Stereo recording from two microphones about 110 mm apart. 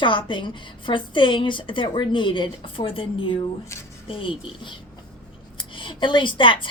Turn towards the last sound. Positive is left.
turn(degrees=50)  # may be behind; listen again after turning